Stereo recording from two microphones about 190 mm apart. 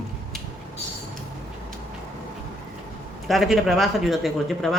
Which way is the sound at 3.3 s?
Centre (ahead or behind).